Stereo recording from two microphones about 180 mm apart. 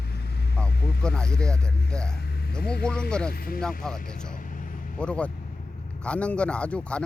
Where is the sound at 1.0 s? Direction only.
5° left (ahead or behind).